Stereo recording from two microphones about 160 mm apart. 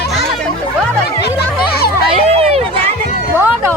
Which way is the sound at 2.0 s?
40° right (ahead or behind).